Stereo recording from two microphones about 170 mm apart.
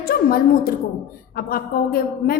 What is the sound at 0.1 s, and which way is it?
A woman's voice, 60° left (ahead or behind).